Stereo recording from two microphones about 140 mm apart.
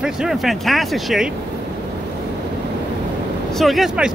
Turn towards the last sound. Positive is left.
turn(degrees=-5)  # may be behind; listen again after turning